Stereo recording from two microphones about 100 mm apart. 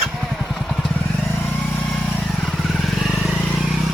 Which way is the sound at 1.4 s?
20° left (ahead or behind).